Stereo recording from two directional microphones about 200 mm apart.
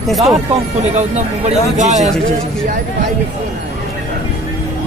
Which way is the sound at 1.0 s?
35° right (ahead or behind).